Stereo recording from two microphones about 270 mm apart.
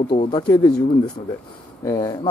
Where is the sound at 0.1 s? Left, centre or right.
Centre.